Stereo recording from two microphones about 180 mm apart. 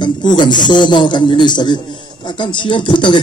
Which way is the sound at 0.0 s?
25° left (ahead or behind).